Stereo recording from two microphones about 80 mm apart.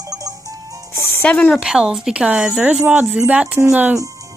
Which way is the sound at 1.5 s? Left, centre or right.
Centre.